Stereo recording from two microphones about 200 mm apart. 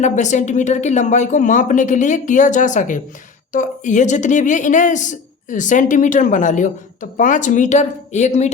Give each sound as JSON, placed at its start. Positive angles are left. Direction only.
{"t": 0.0, "sound": "a woman's voice", "side_deg": 35}